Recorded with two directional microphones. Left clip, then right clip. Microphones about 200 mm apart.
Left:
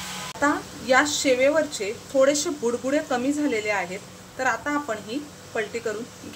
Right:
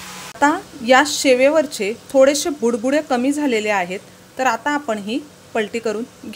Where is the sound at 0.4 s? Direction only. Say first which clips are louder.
Right 7 dB; 45° right (ahead or behind).